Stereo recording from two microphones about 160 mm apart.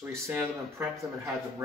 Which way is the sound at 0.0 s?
15° right (ahead or behind).